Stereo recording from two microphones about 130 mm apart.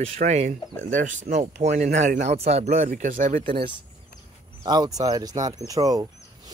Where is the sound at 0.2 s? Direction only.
65° right (ahead or behind).